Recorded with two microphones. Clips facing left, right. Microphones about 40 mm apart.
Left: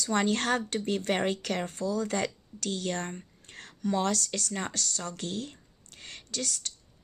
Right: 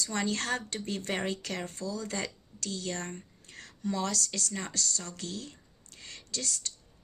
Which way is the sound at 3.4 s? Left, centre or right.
Left.